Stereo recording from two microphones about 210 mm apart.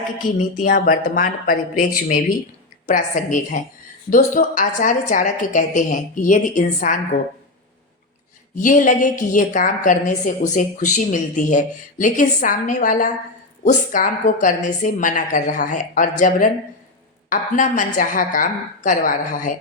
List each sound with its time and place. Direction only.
0.2 s speech: 40° left (ahead or behind)
2.8 s a woman's voice: 40° left (ahead or behind)
8.5 s a woman's voice: 40° left (ahead or behind)